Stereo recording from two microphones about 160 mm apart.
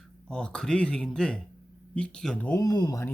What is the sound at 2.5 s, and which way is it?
Speech, 20° left (ahead or behind).